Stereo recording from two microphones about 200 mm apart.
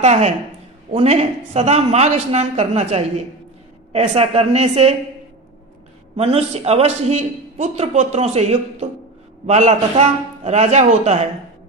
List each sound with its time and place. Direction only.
0.0 s a man's voice: 35° right (ahead or behind)
6.1 s a man's voice: 30° right (ahead or behind)